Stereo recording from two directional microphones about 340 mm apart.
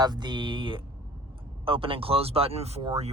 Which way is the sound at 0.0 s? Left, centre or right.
Centre.